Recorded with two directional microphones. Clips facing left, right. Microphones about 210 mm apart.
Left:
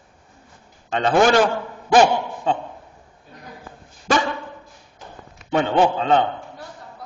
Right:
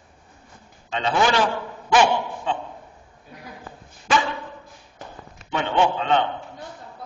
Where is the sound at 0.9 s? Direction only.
50° left (ahead or behind).